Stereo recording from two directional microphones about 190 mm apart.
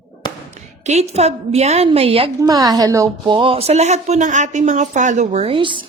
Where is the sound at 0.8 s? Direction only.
35° right (ahead or behind).